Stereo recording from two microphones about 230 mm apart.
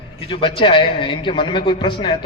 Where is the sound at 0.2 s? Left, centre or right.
Left.